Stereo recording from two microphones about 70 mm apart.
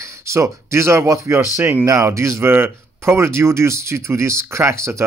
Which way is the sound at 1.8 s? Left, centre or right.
Right.